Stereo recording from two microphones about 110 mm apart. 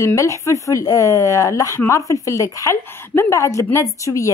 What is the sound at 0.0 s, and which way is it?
A woman's voice, 25° left (ahead or behind).